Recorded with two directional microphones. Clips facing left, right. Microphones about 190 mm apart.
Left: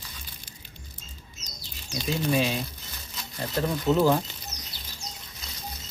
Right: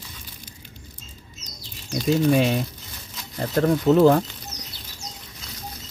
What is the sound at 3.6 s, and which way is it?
Speech, 65° right (ahead or behind).